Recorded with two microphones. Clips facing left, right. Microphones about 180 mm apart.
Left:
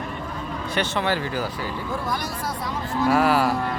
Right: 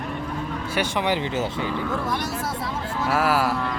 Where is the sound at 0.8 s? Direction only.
15° right (ahead or behind).